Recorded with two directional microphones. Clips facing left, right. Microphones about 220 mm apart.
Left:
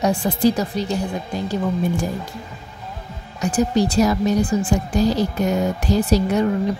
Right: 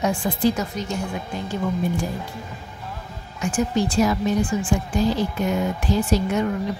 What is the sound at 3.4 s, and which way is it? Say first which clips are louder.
Speech: left 4 dB; 35° left (ahead or behind).